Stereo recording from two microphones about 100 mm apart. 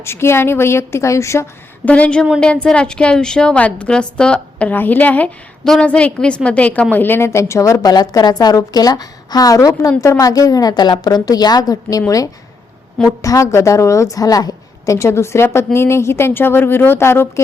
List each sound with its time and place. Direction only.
0.0 s a woman's voice: 25° left (ahead or behind)
1.8 s a woman's voice: 15° left (ahead or behind)